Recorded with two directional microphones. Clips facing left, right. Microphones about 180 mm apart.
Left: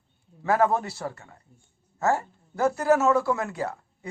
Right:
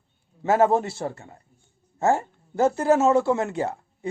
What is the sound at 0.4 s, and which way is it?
Speech, 25° right (ahead or behind).